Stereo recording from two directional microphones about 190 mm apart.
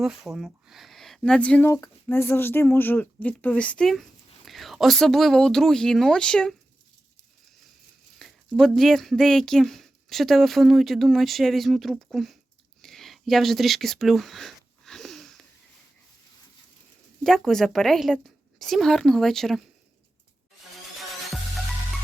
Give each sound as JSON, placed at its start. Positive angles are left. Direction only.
{"t": 0.0, "sound": "speech", "side_deg": 0}
{"t": 8.2, "sound": "speech", "side_deg": 0}
{"t": 12.8, "sound": "a sound", "side_deg": 0}
{"t": 17.2, "sound": "speech", "side_deg": 0}